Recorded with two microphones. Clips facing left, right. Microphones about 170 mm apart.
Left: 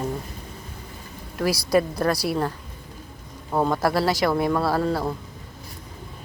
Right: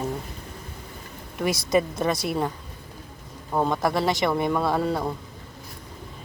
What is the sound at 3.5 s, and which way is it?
Speech, 5° left (ahead or behind).